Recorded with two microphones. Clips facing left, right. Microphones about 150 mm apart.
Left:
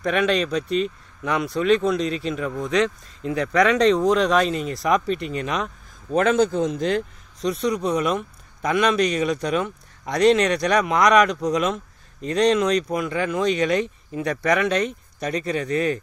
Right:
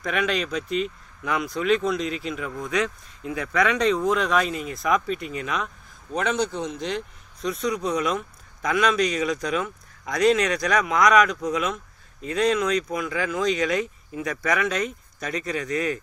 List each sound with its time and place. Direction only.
0.0 s speech: 30° left (ahead or behind)
0.7 s speech: 15° right (ahead or behind)
1.4 s speech: 30° left (ahead or behind)
6.2 s a man's voice: 45° left (ahead or behind)
7.4 s speech: 30° left (ahead or behind)
9.4 s speech: 30° left (ahead or behind)